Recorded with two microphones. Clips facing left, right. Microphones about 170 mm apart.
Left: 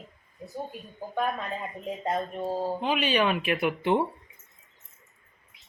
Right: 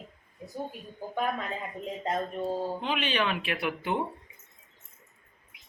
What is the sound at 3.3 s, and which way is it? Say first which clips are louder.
Speech: left 5 dB; 45° left (ahead or behind).